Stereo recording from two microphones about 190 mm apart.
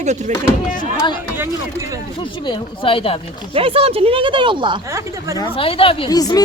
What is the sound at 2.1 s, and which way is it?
Speech, 25° left (ahead or behind).